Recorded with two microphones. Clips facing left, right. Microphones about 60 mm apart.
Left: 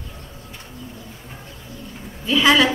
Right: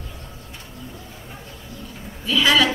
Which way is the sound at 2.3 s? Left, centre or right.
Left.